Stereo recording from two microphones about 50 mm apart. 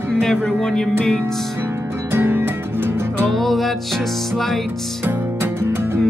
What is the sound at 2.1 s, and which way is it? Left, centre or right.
Music, right.